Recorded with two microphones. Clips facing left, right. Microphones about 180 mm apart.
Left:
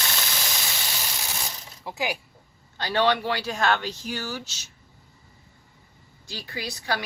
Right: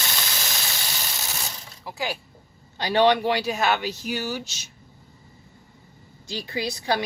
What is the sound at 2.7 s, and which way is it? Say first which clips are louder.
Speech: right 4 dB; 15° right (ahead or behind).